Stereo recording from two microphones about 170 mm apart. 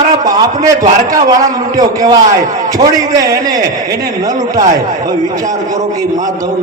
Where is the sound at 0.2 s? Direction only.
20° right (ahead or behind).